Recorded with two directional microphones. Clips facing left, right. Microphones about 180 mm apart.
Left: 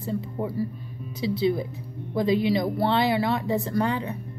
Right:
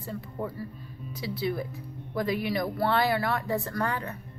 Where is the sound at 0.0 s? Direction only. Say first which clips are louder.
Left 6 dB; 25° left (ahead or behind).